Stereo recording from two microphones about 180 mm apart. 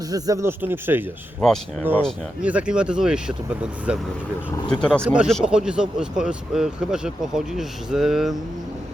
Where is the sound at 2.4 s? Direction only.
5° right (ahead or behind).